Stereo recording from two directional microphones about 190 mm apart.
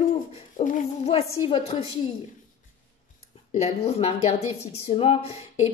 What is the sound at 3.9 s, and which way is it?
A woman's voice, 35° left (ahead or behind).